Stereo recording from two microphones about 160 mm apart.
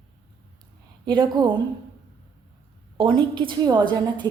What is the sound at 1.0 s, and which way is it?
Speech, 30° right (ahead or behind).